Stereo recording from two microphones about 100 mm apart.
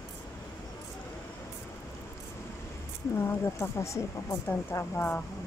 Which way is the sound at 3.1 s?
25° left (ahead or behind).